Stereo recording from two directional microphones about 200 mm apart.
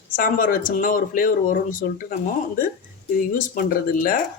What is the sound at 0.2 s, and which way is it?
Speech, 45° left (ahead or behind).